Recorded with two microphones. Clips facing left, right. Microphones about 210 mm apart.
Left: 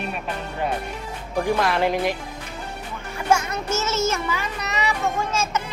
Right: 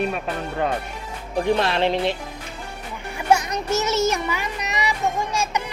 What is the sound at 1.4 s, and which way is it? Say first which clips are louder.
Speech: right 1 dB; 25° right (ahead or behind).